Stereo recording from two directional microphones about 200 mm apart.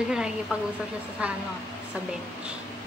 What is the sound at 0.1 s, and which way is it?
A woman's voice, 5° right (ahead or behind).